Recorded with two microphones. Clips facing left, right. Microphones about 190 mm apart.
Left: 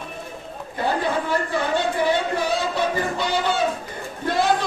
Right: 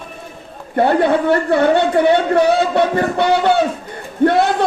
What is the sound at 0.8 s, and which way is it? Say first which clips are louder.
A man's voice: right 9 dB; 65° right (ahead or behind).